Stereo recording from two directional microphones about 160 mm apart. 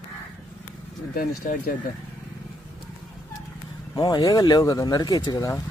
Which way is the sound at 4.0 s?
30° left (ahead or behind).